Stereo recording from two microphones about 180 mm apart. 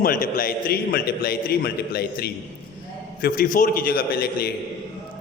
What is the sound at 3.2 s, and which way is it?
A man's voice, 50° left (ahead or behind).